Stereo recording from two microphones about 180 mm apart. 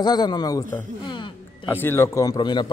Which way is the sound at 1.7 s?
15° left (ahead or behind).